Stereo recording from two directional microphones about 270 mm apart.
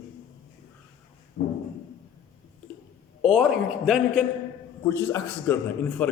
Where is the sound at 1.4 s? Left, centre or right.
Left.